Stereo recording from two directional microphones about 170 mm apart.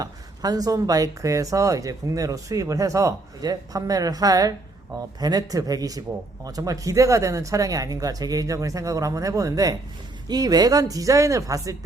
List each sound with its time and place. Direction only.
0.0 s speech: 20° right (ahead or behind)